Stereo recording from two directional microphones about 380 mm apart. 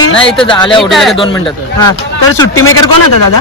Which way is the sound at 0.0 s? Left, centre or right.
Left.